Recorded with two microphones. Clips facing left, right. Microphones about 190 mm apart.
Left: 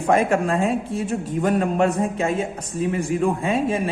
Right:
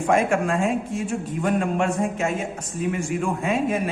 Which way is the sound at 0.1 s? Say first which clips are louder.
Left 2 dB; 35° left (ahead or behind).